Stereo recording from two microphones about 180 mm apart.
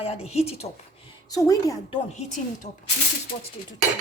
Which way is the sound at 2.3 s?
45° left (ahead or behind).